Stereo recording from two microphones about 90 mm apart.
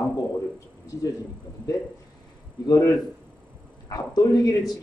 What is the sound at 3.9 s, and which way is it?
Speech, 45° left (ahead or behind).